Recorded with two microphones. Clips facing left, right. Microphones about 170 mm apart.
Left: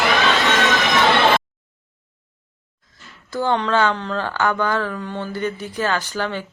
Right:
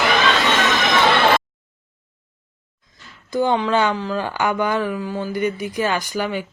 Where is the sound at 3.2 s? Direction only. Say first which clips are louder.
Right 2 dB; 15° right (ahead or behind).